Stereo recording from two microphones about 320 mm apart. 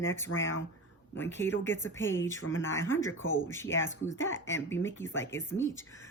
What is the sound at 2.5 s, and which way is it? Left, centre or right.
Speech, left.